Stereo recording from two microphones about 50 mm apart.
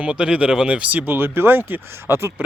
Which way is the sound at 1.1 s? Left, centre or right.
Right.